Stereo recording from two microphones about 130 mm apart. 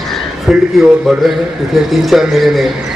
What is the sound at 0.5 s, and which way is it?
Speech, centre (ahead or behind).